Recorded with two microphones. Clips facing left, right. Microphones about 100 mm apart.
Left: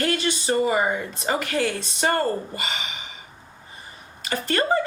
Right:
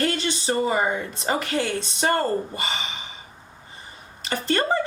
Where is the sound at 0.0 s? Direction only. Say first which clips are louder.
Left 1 dB; 30° right (ahead or behind).